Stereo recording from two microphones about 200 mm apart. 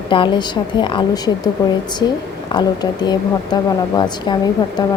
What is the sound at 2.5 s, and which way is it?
A woman's voice, 20° left (ahead or behind).